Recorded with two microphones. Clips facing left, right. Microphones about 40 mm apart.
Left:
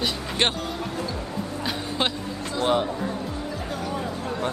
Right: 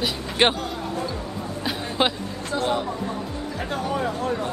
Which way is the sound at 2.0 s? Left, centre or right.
Centre.